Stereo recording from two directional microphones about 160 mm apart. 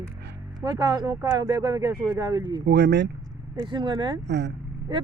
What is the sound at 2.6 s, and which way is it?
Speech, 90° right.